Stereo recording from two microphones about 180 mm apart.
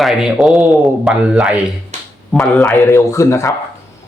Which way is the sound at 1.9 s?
40° right (ahead or behind).